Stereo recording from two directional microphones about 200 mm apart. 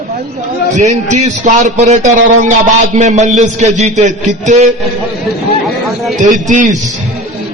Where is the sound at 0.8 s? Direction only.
35° right (ahead or behind).